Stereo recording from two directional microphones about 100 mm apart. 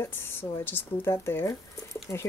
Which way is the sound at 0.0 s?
25° left (ahead or behind).